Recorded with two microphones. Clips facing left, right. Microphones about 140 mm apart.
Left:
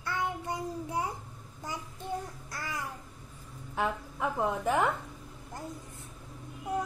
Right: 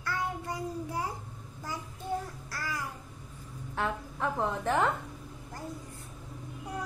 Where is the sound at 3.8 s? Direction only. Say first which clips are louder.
Left 1 dB; 10° left (ahead or behind).